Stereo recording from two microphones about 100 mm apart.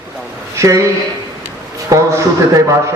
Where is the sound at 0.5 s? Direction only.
30° right (ahead or behind).